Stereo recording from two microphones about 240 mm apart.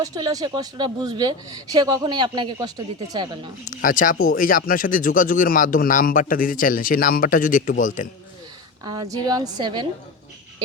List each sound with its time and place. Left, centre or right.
0.0 s speech: centre
3.6 s speech: left
8.8 s speech: centre